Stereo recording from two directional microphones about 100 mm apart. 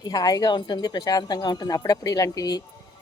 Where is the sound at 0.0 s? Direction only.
40° left (ahead or behind).